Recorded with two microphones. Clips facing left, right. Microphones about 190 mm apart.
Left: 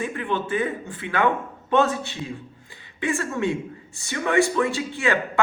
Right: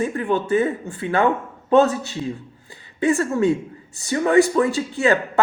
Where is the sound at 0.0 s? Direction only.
40° right (ahead or behind).